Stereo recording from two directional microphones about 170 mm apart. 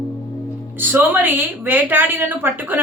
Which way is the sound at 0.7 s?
10° right (ahead or behind).